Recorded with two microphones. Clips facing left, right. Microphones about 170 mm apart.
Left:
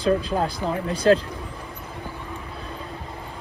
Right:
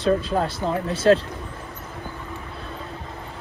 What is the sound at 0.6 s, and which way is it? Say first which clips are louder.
Speech: right 1 dB; 20° right (ahead or behind).